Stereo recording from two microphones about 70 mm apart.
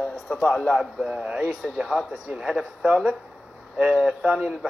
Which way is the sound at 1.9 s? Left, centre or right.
Centre.